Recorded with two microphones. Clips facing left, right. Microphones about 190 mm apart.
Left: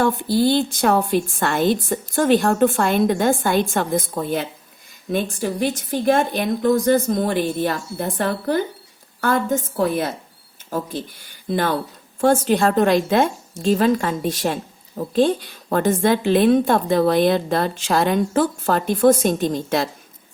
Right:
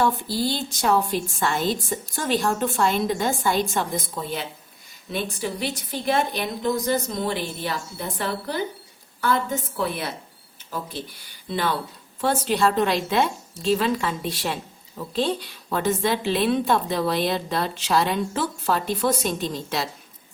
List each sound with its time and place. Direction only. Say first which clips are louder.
0.0 s a woman's voice: left 5 dB; 55° left (ahead or behind)